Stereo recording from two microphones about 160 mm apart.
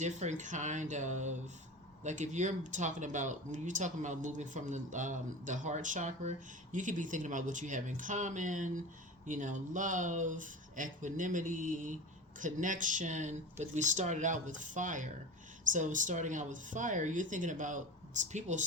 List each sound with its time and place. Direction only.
0.0 s speech: 45° right (ahead or behind)